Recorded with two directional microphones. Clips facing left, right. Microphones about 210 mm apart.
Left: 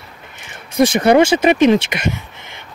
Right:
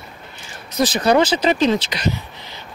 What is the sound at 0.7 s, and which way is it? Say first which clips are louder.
Speech: left 4 dB; 25° left (ahead or behind).